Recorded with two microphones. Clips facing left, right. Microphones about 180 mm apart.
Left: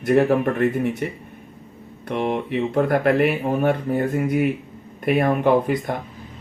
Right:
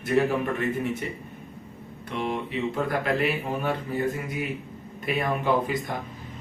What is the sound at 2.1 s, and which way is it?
Speech, 60° left (ahead or behind).